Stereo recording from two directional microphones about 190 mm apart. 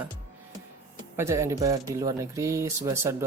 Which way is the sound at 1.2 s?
15° right (ahead or behind).